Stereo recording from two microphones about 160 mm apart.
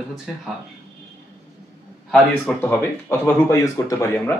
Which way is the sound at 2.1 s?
5° left (ahead or behind).